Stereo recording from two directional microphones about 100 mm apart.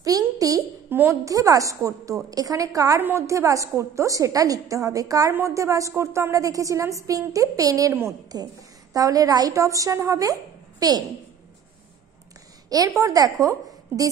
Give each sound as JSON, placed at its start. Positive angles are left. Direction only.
{"t": 0.0, "sound": "a sound", "side_deg": -35}
{"t": 0.8, "sound": "a woman's voice", "side_deg": -20}
{"t": 1.2, "sound": "a woman's voice", "side_deg": -35}
{"t": 3.0, "sound": "a woman's voice", "side_deg": -20}
{"t": 3.3, "sound": "a woman's voice", "side_deg": -30}
{"t": 12.6, "sound": "a woman's voice", "side_deg": -40}